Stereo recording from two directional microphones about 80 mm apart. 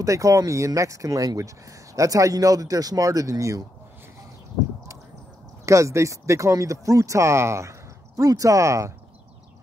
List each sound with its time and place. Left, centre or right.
0.0 s speech: right
5.7 s speech: right
8.2 s speech: right